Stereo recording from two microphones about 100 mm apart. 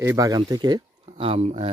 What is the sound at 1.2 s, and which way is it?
Speech, 75° right (ahead or behind).